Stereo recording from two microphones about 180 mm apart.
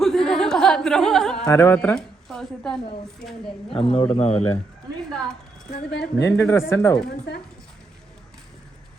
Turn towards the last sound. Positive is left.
turn(degrees=65)  # may be behind; listen again after turning